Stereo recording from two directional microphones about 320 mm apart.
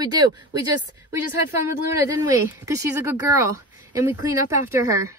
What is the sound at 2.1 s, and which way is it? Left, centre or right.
Speech, centre.